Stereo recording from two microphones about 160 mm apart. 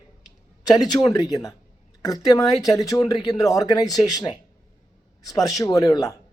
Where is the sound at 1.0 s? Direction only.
20° left (ahead or behind).